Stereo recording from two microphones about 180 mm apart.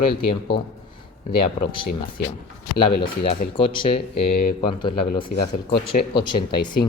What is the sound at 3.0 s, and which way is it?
Speech, 30° left (ahead or behind).